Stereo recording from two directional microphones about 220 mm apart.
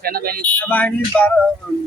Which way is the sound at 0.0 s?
45° right (ahead or behind).